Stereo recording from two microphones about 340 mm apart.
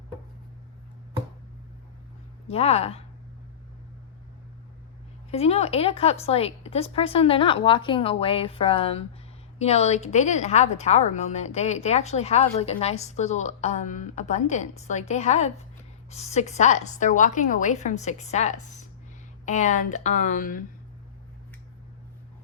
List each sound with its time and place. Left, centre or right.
2.5 s a woman's voice: centre
5.3 s a woman's voice: centre